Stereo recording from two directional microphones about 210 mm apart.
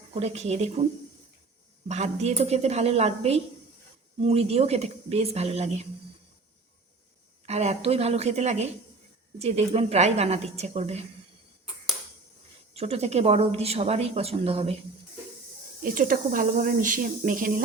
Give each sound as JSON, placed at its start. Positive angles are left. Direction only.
{"t": 0.1, "sound": "speech", "side_deg": -30}
{"t": 1.9, "sound": "speech", "side_deg": -30}
{"t": 7.4, "sound": "speech", "side_deg": -30}
{"t": 12.7, "sound": "speech", "side_deg": -30}
{"t": 15.8, "sound": "speech", "side_deg": -40}